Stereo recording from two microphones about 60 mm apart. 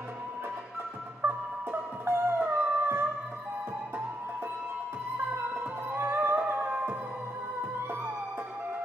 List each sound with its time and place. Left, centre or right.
1.2 s music: right
5.1 s music: right